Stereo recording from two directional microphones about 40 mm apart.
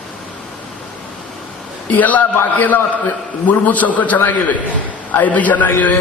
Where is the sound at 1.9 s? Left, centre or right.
Left.